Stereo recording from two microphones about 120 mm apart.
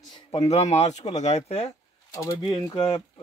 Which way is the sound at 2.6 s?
50° left (ahead or behind).